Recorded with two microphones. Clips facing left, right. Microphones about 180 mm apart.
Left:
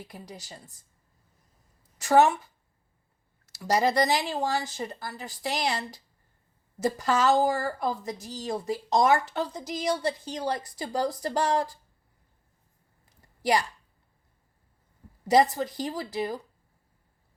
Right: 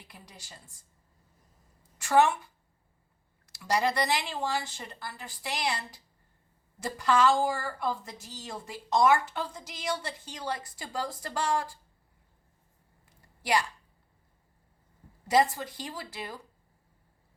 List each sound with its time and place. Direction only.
0.1 s speech: 40° left (ahead or behind)
2.0 s speech: 40° left (ahead or behind)
3.4 s speech: 40° left (ahead or behind)
13.1 s a sound: 40° left (ahead or behind)
15.8 s speech: 40° left (ahead or behind)